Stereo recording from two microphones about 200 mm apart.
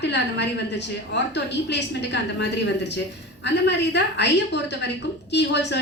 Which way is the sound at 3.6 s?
60° left (ahead or behind).